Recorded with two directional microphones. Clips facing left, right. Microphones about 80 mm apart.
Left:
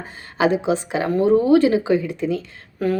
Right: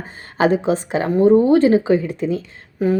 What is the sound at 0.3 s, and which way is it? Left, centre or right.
Speech, right.